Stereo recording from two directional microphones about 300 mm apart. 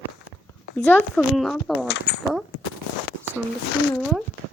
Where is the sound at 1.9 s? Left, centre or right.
Left.